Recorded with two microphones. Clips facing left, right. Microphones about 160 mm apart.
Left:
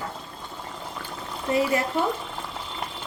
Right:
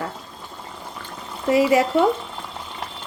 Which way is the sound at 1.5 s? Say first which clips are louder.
Right 6 dB; 90° right.